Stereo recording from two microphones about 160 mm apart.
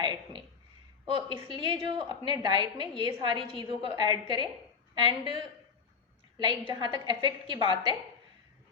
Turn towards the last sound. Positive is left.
turn(degrees=-30)  # may be behind; listen again after turning